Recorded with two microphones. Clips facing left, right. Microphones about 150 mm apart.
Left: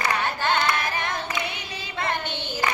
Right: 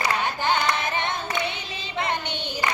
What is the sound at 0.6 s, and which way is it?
Child singing, 20° right (ahead or behind).